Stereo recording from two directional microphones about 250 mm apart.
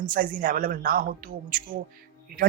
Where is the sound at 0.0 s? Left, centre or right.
Right.